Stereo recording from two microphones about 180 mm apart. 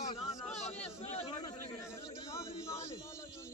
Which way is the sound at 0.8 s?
35° left (ahead or behind).